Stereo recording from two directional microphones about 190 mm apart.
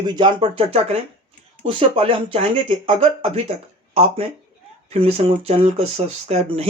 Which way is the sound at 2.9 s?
30° right (ahead or behind).